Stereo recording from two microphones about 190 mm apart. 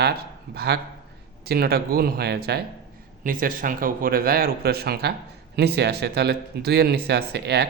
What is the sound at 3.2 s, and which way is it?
A man's voice, 45° right (ahead or behind).